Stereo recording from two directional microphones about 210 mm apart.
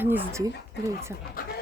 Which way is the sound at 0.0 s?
10° right (ahead or behind).